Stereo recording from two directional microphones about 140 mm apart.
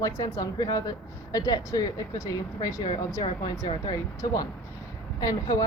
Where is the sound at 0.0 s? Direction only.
25° left (ahead or behind).